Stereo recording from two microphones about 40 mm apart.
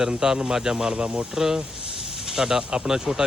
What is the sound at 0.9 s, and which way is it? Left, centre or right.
Speech, right.